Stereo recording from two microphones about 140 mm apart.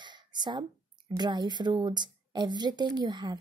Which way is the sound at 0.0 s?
30° right (ahead or behind).